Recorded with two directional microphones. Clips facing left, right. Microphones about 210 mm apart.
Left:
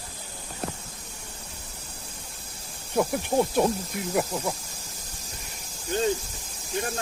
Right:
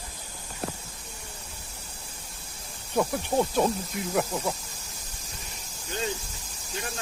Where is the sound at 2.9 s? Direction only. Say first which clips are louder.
Left 1 dB; 15° left (ahead or behind).